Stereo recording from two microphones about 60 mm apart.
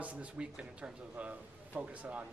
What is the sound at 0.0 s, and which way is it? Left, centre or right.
A man's voice, right.